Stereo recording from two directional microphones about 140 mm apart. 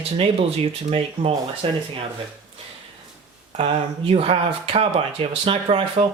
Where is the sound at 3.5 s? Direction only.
45° right (ahead or behind).